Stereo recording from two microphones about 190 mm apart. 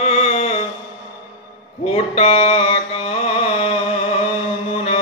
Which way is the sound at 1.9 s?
30° left (ahead or behind).